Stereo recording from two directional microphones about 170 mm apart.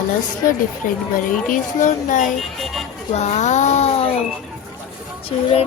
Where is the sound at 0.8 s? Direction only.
55° left (ahead or behind).